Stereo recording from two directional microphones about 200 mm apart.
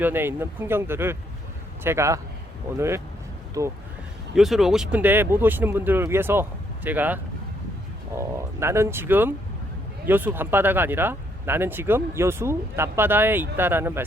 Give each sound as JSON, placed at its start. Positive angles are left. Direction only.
{"t": 0.0, "sound": "speech", "side_deg": -10}
{"t": 4.4, "sound": "speech", "side_deg": 0}